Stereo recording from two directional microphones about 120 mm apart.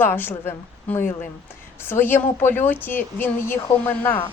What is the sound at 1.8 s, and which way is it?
Speech, 20° left (ahead or behind).